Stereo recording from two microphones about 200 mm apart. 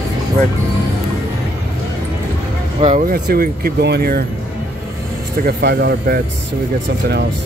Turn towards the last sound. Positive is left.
turn(degrees=-50)  # may be behind; listen again after turning